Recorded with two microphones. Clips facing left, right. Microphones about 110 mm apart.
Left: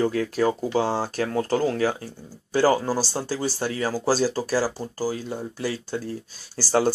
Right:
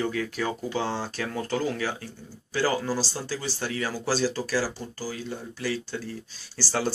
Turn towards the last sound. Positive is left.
turn(degrees=45)  # may be behind; listen again after turning